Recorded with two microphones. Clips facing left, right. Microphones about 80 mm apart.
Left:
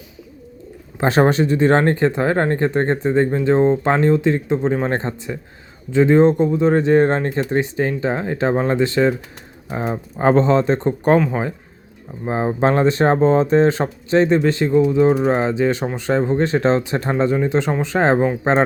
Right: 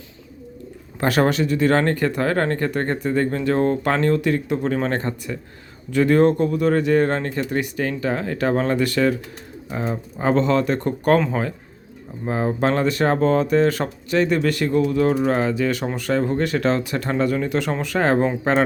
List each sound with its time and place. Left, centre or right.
0.9 s speech: left
10.2 s speech: left
11.2 s speech: centre
12.2 s speech: left